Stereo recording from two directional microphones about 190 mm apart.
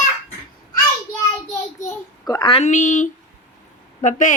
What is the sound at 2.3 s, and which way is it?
A woman's voice, 25° left (ahead or behind).